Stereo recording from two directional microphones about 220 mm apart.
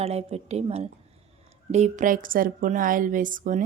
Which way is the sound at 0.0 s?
30° right (ahead or behind).